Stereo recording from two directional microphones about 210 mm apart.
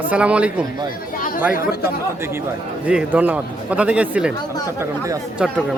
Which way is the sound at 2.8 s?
5° right (ahead or behind).